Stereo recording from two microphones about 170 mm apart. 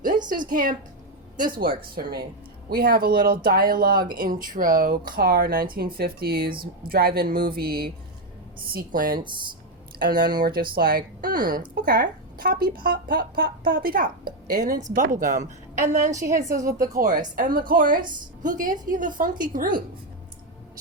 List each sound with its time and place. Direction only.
0.3 s a woman's voice: 50° right (ahead or behind)